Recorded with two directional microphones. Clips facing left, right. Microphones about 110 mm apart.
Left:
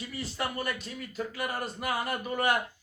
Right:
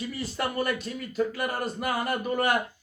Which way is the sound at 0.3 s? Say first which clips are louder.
Right 5 dB; 55° right (ahead or behind).